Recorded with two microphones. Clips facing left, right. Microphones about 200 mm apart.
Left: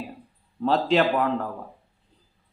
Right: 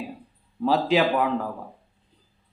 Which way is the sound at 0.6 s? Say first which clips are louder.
Even; 5° right (ahead or behind).